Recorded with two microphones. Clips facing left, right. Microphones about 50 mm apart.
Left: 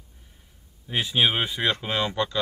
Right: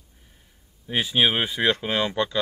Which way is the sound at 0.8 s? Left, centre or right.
Centre.